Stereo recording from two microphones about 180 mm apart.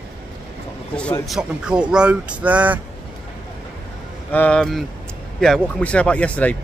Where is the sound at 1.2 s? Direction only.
5° right (ahead or behind).